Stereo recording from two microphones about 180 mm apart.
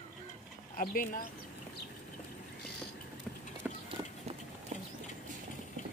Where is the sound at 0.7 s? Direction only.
50° left (ahead or behind).